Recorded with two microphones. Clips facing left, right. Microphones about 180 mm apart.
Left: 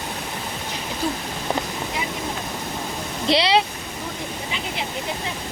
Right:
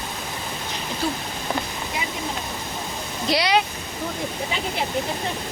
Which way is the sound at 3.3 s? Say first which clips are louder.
Left 2 dB; 25° left (ahead or behind).